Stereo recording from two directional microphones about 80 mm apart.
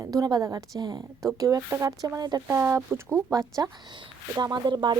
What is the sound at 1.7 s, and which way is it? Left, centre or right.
Speech, right.